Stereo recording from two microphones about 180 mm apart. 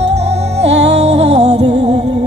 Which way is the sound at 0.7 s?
70° right (ahead or behind).